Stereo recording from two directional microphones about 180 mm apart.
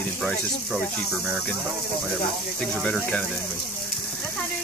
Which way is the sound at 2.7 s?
5° left (ahead or behind).